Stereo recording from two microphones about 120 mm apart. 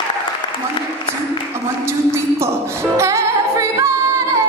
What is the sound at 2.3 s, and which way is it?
Music, 20° right (ahead or behind).